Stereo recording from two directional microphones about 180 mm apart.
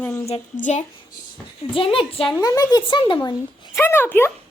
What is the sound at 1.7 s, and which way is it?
Speech, 30° left (ahead or behind).